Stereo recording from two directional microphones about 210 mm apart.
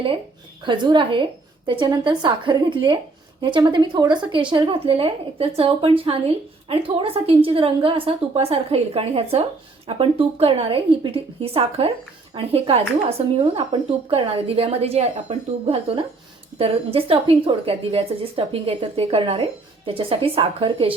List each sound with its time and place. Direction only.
0.6 s speech: 20° right (ahead or behind)